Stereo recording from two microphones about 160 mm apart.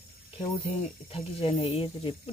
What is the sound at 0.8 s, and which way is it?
Speech, 40° left (ahead or behind).